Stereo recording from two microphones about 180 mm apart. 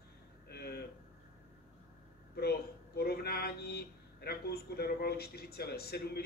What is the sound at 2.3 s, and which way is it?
Speech, 65° left (ahead or behind).